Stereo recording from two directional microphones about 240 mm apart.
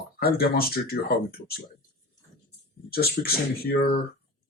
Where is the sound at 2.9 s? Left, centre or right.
Left.